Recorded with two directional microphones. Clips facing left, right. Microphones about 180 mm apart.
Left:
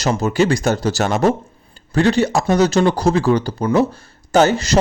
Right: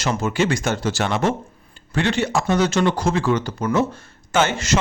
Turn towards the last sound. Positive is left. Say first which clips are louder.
# left 6 dB
turn(degrees=35)  # may be behind; listen again after turning